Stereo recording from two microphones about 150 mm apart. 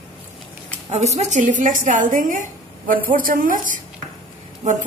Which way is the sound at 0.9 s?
45° right (ahead or behind).